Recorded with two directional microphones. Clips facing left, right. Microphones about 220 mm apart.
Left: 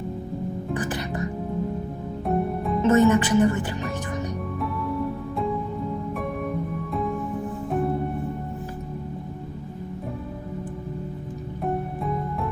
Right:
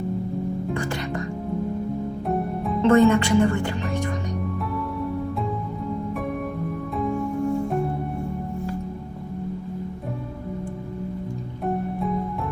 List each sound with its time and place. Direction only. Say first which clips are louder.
2.2 s music: left 3 dB; centre (ahead or behind)
2.8 s speech: right 2 dB; 20° left (ahead or behind)
6.9 s music: right 3 dB; centre (ahead or behind)
11.6 s music: right 2 dB; centre (ahead or behind)